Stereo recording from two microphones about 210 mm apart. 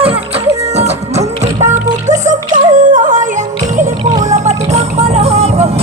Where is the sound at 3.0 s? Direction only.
35° right (ahead or behind).